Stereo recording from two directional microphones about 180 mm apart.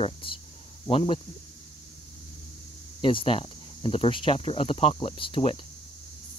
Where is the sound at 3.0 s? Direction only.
30° left (ahead or behind).